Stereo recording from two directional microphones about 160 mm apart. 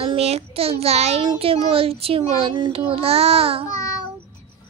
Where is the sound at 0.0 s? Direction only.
35° right (ahead or behind).